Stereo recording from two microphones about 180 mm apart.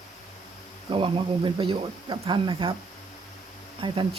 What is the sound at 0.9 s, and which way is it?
Speech, 30° right (ahead or behind).